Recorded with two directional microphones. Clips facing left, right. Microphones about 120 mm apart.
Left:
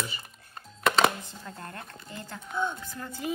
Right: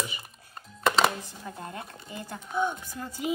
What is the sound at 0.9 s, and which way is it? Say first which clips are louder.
Chopping: even; centre (ahead or behind).